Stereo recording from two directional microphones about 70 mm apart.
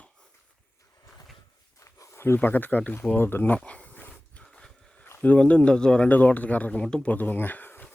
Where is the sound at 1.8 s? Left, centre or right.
Left.